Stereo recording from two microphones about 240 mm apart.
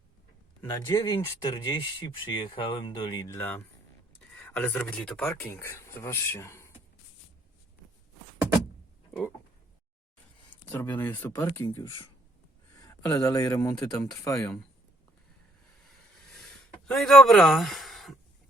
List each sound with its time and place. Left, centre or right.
0.6 s speech: centre
10.5 s speech: centre
16.4 s a sound: centre